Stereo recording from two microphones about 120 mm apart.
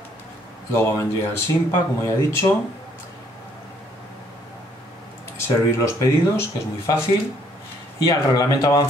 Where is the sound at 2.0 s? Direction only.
20° left (ahead or behind).